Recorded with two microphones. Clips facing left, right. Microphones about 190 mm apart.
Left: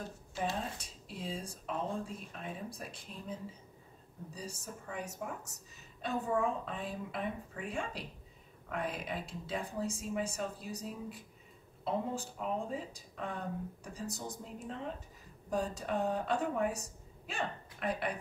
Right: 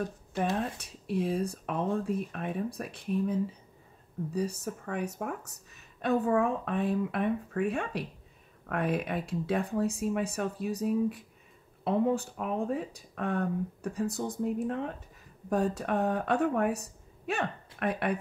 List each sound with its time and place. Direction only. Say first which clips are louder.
0.6 s speech: right 7 dB; 60° right (ahead or behind)